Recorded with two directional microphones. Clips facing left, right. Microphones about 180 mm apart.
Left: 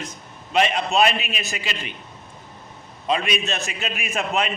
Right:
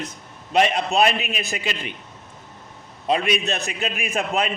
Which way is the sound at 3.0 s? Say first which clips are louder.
Right 2 dB; 40° right (ahead or behind).